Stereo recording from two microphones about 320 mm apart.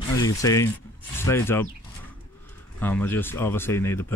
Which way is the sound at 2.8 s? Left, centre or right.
Centre.